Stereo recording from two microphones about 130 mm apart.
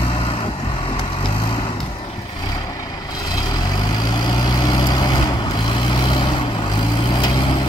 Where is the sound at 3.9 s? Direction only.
35° left (ahead or behind).